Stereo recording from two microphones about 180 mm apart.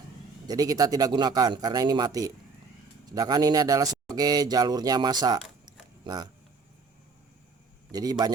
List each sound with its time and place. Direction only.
0.4 s speech: 20° right (ahead or behind)
5.6 s a sound: 20° right (ahead or behind)
7.9 s speech: 20° right (ahead or behind)